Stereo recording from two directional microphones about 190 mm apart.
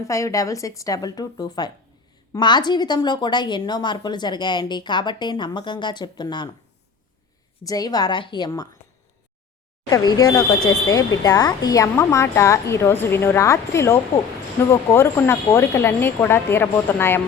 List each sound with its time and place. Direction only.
0.1 s a woman's voice: 15° left (ahead or behind)
7.6 s a woman's voice: 20° left (ahead or behind)
9.9 s a woman's voice: 20° left (ahead or behind)